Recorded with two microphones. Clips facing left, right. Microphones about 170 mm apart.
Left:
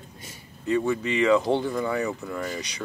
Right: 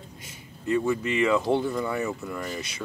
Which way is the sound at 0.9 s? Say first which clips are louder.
Left 3 dB; 5° right (ahead or behind).